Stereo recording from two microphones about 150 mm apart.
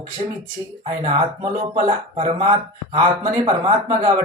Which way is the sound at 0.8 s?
35° right (ahead or behind).